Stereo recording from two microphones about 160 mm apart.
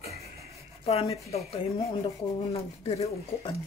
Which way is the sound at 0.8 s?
40° left (ahead or behind).